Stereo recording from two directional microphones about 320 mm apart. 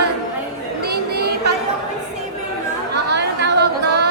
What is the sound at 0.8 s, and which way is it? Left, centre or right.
Chatter, right.